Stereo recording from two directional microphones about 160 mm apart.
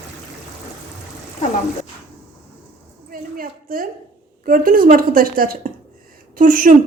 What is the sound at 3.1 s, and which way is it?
A woman's voice, 65° right (ahead or behind).